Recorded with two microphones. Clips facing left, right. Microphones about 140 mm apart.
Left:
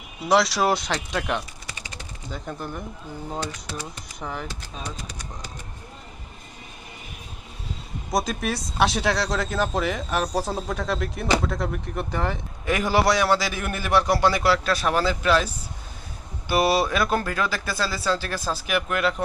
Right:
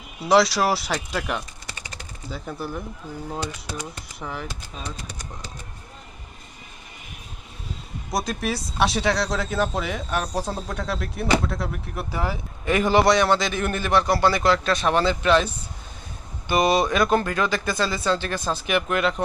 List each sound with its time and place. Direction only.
0.3 s speech: centre (ahead or behind)
4.2 s speech: centre (ahead or behind)
8.1 s speech: centre (ahead or behind)
12.6 s a man's voice: 5° left (ahead or behind)
16.5 s speech: 5° left (ahead or behind)